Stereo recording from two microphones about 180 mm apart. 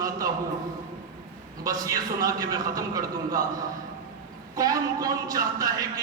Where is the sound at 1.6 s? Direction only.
20° right (ahead or behind).